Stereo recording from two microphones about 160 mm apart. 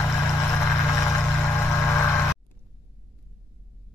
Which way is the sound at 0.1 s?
20° left (ahead or behind).